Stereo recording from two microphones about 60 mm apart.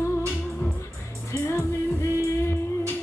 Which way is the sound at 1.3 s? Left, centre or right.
Left.